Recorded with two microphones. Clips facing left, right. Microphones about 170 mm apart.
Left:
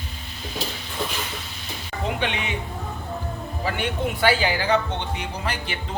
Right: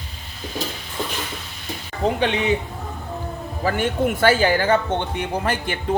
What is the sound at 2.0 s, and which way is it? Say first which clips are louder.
Speech: right 6 dB; 35° right (ahead or behind).